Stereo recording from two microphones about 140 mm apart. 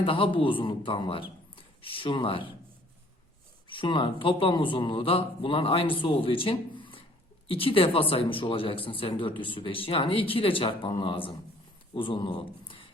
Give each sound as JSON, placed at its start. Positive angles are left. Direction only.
{"t": 0.0, "sound": "speech", "side_deg": 40}
{"t": 3.7, "sound": "speech", "side_deg": 35}